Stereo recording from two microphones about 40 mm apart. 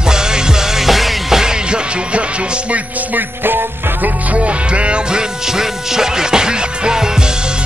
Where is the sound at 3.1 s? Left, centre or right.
Right.